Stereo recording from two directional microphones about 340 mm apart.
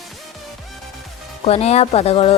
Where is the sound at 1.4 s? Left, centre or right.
Centre.